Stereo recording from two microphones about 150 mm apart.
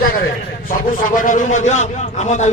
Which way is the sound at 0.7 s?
60° left (ahead or behind).